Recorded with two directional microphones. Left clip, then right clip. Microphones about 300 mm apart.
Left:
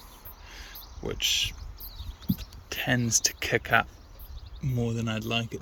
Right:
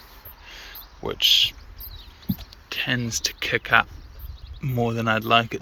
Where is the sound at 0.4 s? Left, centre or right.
Centre.